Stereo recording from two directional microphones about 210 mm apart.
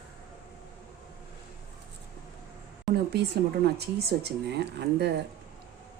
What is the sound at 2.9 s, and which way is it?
A woman's voice, 50° right (ahead or behind).